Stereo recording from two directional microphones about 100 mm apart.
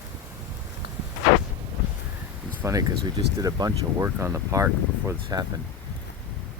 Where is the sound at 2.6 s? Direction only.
35° right (ahead or behind).